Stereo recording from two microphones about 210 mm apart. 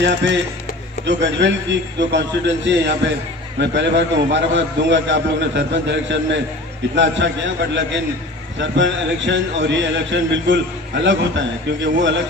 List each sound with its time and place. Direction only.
0.0 s a man's voice: 60° right (ahead or behind)